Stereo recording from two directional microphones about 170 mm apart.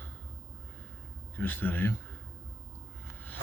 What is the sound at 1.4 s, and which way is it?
Speech, 10° left (ahead or behind).